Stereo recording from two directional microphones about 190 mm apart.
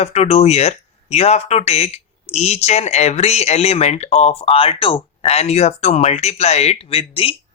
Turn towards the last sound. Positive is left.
turn(degrees=30)  # may be behind; listen again after turning